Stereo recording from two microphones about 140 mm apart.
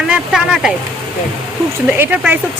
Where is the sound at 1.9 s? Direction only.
10° right (ahead or behind).